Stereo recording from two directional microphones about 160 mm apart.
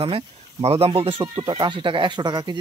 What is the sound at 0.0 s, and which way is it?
Speech, 40° right (ahead or behind).